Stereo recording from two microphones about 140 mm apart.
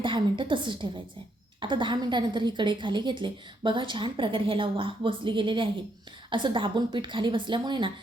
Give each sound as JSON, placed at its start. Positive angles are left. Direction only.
{"t": 0.0, "sound": "a woman's voice", "side_deg": -35}